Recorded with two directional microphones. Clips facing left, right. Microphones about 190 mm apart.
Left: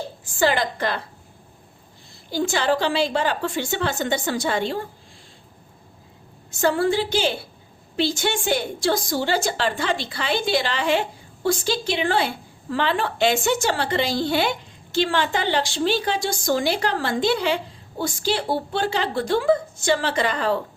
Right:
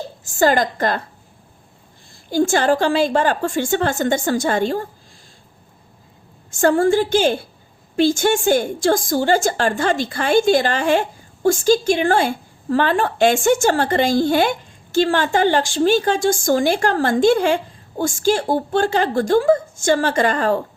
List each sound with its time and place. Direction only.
0.3 s a woman's voice: 45° right (ahead or behind)
2.3 s a woman's voice: 50° right (ahead or behind)
6.5 s a woman's voice: 50° right (ahead or behind)